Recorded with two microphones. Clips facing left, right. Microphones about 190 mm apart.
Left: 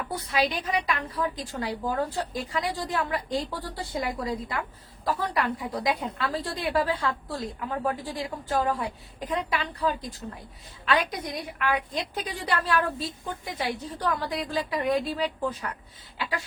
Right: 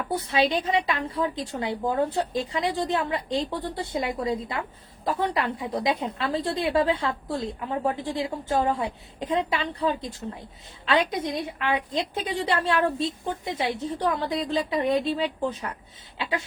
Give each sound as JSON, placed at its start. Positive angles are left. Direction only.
{"t": 0.1, "sound": "a woman's voice", "side_deg": -25}